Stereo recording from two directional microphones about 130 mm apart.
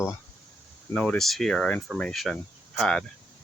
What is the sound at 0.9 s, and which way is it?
Speech, 10° left (ahead or behind).